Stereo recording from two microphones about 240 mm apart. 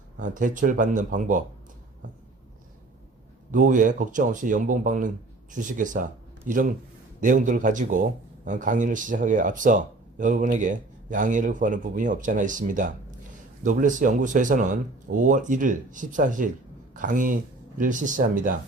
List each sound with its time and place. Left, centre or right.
0.2 s speech: right
3.5 s speech: right